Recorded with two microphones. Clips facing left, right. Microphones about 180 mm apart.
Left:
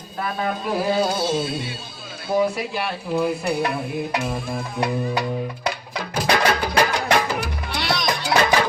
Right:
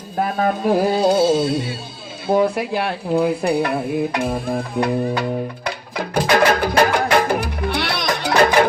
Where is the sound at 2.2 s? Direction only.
55° right (ahead or behind).